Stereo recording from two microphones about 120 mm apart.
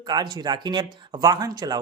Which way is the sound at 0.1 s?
35° right (ahead or behind).